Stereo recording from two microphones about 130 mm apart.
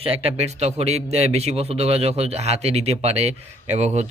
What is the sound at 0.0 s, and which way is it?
Speech, 50° right (ahead or behind).